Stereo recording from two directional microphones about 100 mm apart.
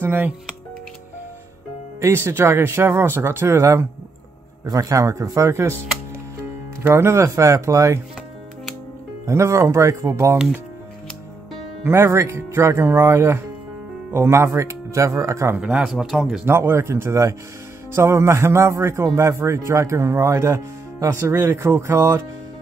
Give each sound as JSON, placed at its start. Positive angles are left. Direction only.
{"t": 0.0, "sound": "speech", "side_deg": -20}
{"t": 2.0, "sound": "speech", "side_deg": -25}
{"t": 6.9, "sound": "speech", "side_deg": -25}
{"t": 9.2, "sound": "speech", "side_deg": -30}
{"t": 11.8, "sound": "speech", "side_deg": -25}
{"t": 15.6, "sound": "speech", "side_deg": -5}
{"t": 16.4, "sound": "speech", "side_deg": -25}